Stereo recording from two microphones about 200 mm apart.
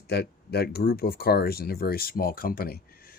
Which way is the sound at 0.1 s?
55° left (ahead or behind).